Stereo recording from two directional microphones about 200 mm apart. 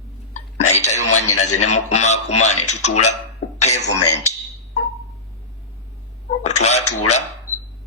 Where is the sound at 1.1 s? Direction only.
90° left.